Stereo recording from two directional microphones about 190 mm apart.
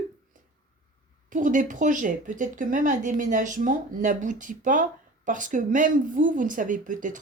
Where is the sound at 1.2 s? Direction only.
40° right (ahead or behind).